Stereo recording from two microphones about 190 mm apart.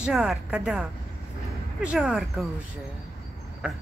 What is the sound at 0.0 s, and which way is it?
Speech, 5° right (ahead or behind).